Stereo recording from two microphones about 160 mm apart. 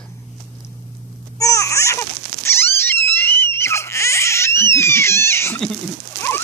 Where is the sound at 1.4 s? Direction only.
20° left (ahead or behind).